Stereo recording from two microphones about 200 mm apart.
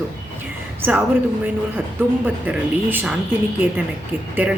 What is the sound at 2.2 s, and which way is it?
Speech, 10° right (ahead or behind).